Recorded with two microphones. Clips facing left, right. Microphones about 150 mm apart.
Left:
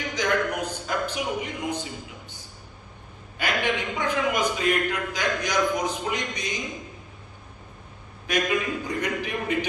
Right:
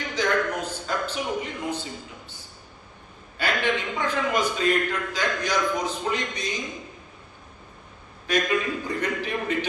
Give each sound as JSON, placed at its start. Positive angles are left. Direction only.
{"t": 0.1, "sound": "a sound", "side_deg": 15}
{"t": 3.3, "sound": "a man's voice", "side_deg": 15}
{"t": 8.3, "sound": "a man's voice", "side_deg": 15}